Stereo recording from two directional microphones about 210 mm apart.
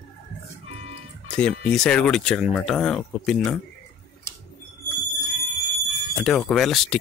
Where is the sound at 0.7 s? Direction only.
30° right (ahead or behind).